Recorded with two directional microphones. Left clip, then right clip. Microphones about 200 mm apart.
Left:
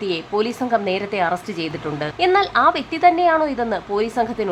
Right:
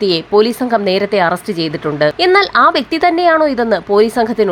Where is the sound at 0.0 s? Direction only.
25° right (ahead or behind).